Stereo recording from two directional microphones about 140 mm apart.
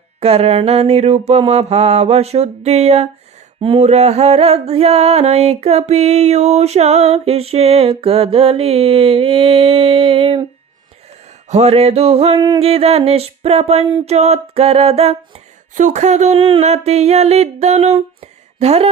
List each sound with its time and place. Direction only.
0.2 s music: 45° right (ahead or behind)
11.4 s music: 50° right (ahead or behind)
15.7 s music: 60° right (ahead or behind)